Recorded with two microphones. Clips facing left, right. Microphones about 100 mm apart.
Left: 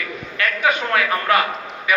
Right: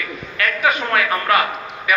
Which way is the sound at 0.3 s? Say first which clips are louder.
Right 1 dB; 25° left (ahead or behind).